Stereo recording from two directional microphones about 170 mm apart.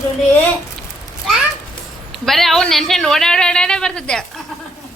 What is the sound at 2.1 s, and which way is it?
Speech, centre (ahead or behind).